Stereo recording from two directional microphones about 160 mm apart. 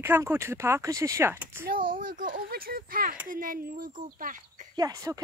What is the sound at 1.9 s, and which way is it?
Speech, 60° right (ahead or behind).